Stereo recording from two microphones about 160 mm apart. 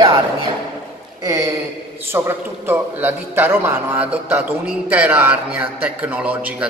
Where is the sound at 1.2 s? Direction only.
20° right (ahead or behind).